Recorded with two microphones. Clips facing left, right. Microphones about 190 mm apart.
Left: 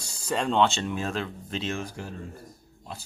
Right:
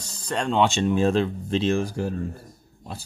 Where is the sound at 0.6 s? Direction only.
15° right (ahead or behind).